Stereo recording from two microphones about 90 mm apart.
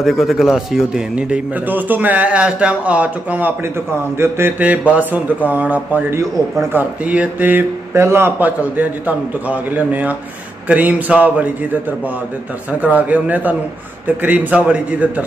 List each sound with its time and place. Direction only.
0.0 s a man's voice: centre (ahead or behind)
12.8 s a man's voice: 15° right (ahead or behind)